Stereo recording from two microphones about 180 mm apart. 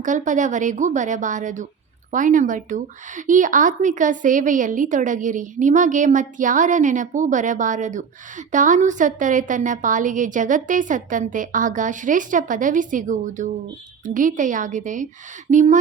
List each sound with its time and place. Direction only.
0.0 s speech: 45° right (ahead or behind)